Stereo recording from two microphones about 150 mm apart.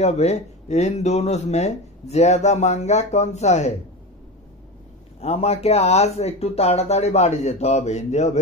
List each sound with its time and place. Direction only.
0.0 s speech: 45° left (ahead or behind)
5.2 s speech: 45° left (ahead or behind)